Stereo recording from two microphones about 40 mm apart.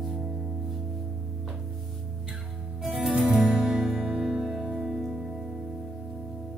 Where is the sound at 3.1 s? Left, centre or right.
Right; by 5.3 s centre.